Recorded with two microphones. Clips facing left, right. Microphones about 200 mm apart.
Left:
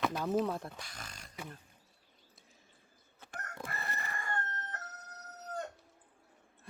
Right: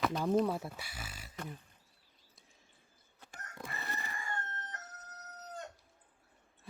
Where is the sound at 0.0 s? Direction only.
5° left (ahead or behind).